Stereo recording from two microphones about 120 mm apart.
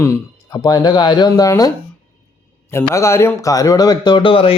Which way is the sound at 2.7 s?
25° left (ahead or behind).